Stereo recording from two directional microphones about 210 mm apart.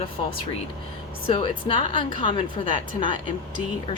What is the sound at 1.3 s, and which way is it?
A woman's voice, 25° left (ahead or behind).